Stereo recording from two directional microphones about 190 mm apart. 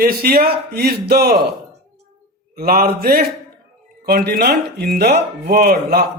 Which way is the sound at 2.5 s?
50° right (ahead or behind).